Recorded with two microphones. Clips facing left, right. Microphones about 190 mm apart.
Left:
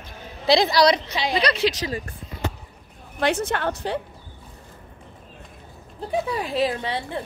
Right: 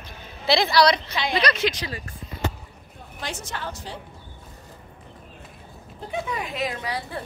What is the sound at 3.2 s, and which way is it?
Speech, 60° left (ahead or behind).